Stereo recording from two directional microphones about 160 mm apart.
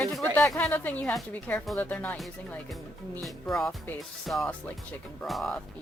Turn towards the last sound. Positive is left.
turn(degrees=0)  # may be behind; listen again after turning